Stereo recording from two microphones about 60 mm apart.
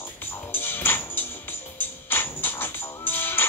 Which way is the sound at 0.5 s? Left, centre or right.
Left.